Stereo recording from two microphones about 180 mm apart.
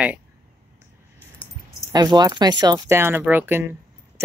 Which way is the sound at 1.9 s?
20° right (ahead or behind).